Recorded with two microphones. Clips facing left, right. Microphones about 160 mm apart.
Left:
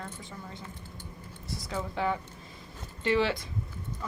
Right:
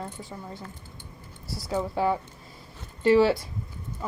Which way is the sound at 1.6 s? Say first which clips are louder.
Right 6 dB; 35° right (ahead or behind).